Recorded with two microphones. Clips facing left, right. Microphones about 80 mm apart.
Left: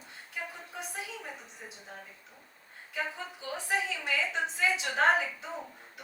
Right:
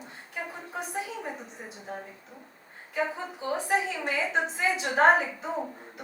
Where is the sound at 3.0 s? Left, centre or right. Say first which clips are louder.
Right 6 dB; right.